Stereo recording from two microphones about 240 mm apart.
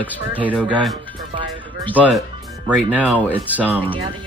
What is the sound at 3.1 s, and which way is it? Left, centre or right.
Speech, centre.